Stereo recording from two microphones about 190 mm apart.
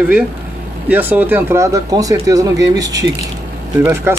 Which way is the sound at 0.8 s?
10° right (ahead or behind).